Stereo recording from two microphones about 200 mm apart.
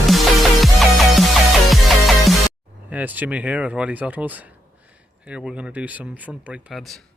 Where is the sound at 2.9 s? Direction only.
10° right (ahead or behind).